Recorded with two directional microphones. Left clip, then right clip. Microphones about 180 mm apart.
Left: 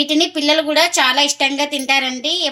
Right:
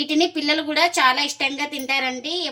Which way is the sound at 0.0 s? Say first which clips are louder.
Left 5 dB; 40° left (ahead or behind).